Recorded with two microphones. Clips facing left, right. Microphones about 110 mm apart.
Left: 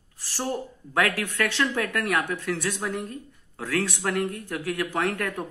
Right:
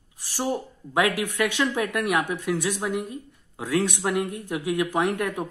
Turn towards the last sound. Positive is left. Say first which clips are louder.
# right 2 dB
turn(degrees=-15)  # may be behind; listen again after turning